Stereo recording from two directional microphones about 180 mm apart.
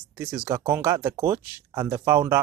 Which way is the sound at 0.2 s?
10° right (ahead or behind).